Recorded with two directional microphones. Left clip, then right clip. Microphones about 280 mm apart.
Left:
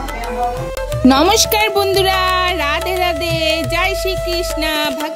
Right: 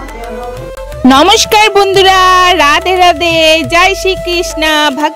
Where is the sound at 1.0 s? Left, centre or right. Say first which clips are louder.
Right 6 dB; right.